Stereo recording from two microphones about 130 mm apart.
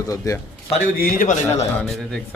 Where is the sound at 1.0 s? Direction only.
90° left.